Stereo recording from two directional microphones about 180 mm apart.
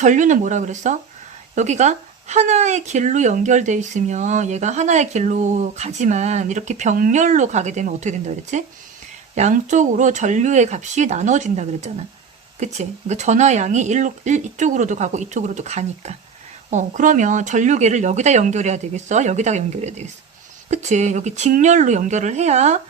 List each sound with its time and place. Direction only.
0.0 s speech: 45° right (ahead or behind)